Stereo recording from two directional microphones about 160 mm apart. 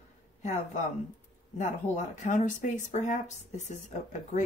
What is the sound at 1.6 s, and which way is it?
Speech, 50° left (ahead or behind).